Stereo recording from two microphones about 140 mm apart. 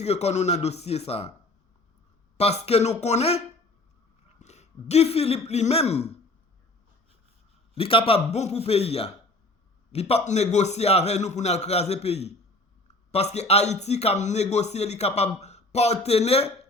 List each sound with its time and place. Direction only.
0.0 s speech: 50° left (ahead or behind)
2.4 s speech: 45° left (ahead or behind)
7.8 s speech: 40° left (ahead or behind)